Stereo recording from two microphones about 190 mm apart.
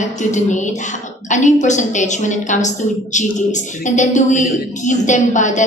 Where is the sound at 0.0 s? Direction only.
40° left (ahead or behind).